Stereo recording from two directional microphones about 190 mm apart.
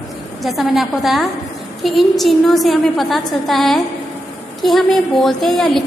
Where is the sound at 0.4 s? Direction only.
Centre (ahead or behind).